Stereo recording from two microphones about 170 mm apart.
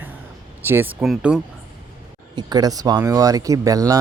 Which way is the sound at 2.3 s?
25° right (ahead or behind).